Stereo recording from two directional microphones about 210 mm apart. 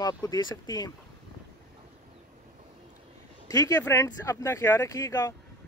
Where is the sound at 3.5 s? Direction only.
15° left (ahead or behind).